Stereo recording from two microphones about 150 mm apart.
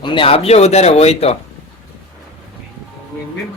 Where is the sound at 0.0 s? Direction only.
35° left (ahead or behind).